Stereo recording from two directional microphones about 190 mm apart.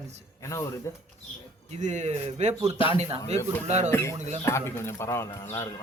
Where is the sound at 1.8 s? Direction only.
40° right (ahead or behind).